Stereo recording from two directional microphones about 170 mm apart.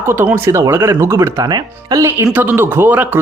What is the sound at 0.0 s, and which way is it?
Speech, 15° right (ahead or behind).